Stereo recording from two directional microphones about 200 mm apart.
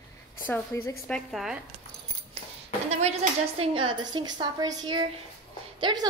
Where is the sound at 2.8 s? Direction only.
35° right (ahead or behind).